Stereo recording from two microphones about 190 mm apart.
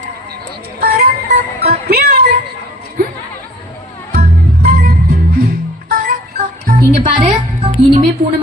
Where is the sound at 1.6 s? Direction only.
55° right (ahead or behind).